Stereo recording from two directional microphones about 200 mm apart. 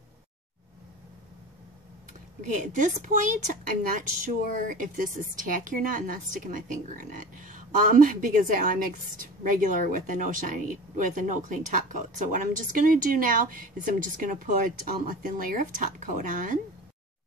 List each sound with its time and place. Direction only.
2.4 s a woman's voice: 40° right (ahead or behind)